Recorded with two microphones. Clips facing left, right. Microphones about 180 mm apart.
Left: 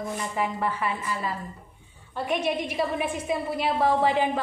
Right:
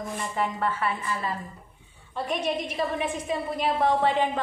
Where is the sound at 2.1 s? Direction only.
5° left (ahead or behind).